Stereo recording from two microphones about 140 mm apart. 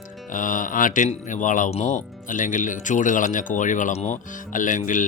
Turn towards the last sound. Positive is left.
turn(degrees=65)  # may be behind; listen again after turning